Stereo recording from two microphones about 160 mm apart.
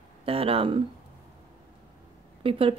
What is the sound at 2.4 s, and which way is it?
Speech, 35° right (ahead or behind).